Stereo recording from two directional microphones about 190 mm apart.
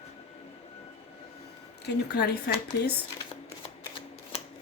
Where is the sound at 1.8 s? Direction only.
55° left (ahead or behind).